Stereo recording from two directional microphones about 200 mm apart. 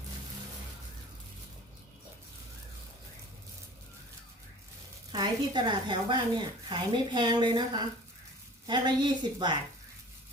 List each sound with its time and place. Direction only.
5.1 s speech: 20° right (ahead or behind)